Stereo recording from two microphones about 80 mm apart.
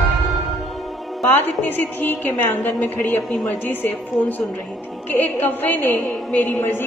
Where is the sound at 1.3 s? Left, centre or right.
Left.